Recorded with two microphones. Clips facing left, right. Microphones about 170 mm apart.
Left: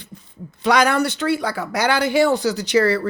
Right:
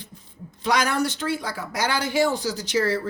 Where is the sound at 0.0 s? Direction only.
70° left (ahead or behind).